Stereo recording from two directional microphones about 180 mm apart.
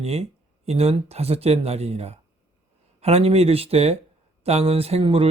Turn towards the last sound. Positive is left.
turn(degrees=-30)  # may be behind; listen again after turning